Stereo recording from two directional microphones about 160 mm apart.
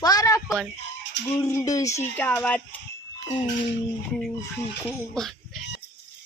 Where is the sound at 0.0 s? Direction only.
20° left (ahead or behind).